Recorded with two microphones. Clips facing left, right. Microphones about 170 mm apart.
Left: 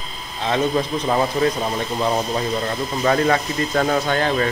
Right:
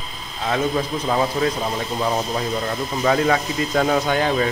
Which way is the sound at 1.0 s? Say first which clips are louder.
Left 1 dB; centre (ahead or behind).